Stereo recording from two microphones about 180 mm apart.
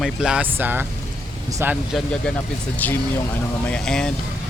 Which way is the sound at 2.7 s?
10° left (ahead or behind).